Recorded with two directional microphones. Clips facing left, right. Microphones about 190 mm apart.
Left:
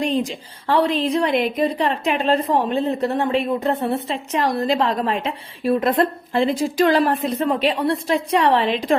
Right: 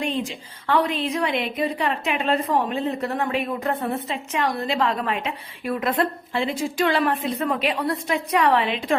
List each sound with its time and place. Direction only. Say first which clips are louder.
0.0 s a woman's voice: left 5 dB; 35° left (ahead or behind)